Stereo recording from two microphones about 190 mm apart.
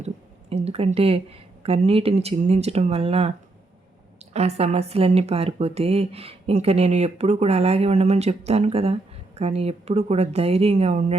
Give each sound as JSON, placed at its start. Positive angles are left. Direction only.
{"t": 0.5, "sound": "a woman's voice", "side_deg": -30}